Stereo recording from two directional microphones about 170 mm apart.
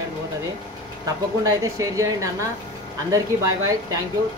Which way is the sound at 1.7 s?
20° right (ahead or behind).